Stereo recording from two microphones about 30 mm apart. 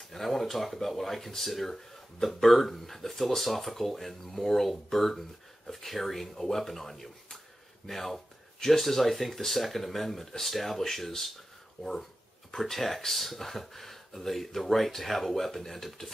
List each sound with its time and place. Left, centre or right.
0.1 s speech: centre
12.4 s speech: centre